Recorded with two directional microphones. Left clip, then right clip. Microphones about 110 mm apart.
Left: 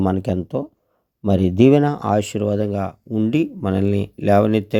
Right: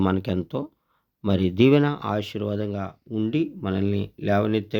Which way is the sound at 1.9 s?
50° left (ahead or behind).